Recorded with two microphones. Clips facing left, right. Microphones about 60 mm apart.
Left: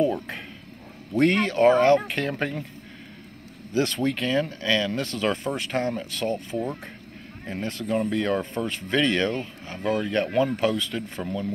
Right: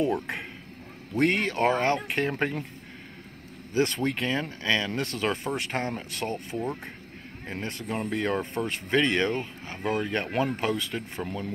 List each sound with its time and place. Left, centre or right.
1.1 s speech: centre
1.6 s speech: right
3.7 s speech: right
6.5 s speech: centre
7.4 s speech: centre